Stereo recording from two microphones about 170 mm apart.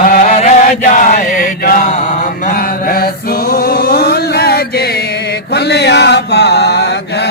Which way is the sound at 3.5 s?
65° left (ahead or behind).